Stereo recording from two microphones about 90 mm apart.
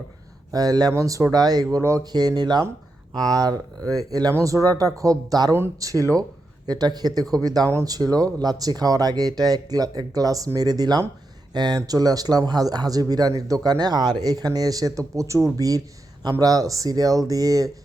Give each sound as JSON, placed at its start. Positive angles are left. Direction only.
{"t": 0.5, "sound": "speech", "side_deg": -45}
{"t": 1.6, "sound": "speech", "side_deg": -35}
{"t": 2.1, "sound": "speech", "side_deg": -50}